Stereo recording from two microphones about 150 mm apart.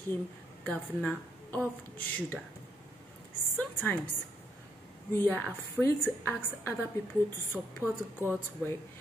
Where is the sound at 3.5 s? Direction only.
10° left (ahead or behind).